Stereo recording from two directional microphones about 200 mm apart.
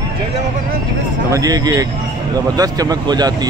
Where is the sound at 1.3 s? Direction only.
20° right (ahead or behind).